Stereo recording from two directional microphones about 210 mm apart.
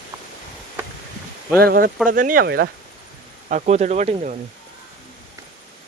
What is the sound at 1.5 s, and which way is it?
Speech, 45° right (ahead or behind).